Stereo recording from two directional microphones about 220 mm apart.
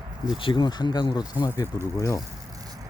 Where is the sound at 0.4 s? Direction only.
20° left (ahead or behind).